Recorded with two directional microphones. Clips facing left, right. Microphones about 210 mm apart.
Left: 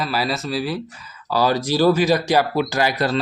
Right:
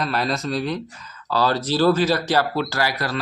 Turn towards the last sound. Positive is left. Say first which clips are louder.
# left 4 dB
turn(degrees=25)  # may be behind; listen again after turning